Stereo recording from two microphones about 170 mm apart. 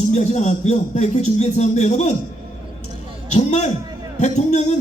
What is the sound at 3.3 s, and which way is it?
A man's voice, 40° left (ahead or behind).